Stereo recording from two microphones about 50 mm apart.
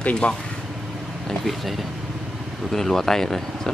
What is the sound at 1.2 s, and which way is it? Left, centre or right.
Speech, centre.